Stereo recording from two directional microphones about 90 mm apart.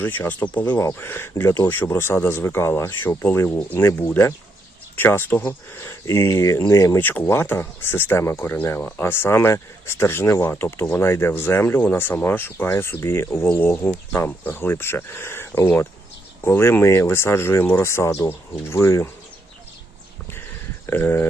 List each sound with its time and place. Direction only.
0.0 s speech: 20° left (ahead or behind)
7.0 s speech: 20° left (ahead or behind)
20.8 s speech: 25° left (ahead or behind)